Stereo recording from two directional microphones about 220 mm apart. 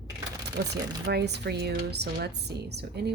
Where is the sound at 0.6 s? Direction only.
45° right (ahead or behind).